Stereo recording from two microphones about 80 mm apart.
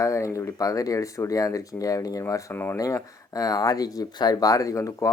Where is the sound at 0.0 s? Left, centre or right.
Left.